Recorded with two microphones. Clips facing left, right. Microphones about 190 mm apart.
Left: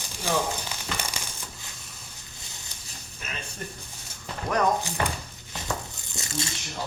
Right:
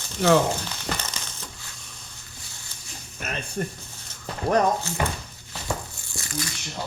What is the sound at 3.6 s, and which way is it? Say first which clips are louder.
Speech: right 11 dB; 55° right (ahead or behind).